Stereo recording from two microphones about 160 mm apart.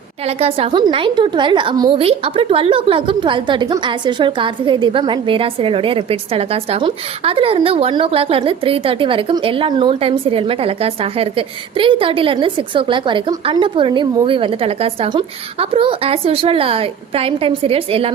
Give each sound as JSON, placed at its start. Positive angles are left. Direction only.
{"t": 0.3, "sound": "a woman's voice", "side_deg": -40}